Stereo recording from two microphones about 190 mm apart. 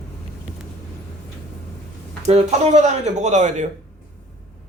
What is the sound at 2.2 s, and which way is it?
Speech, 35° right (ahead or behind).